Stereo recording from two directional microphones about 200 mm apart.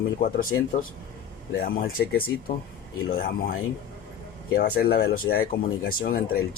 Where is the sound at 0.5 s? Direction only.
65° left (ahead or behind).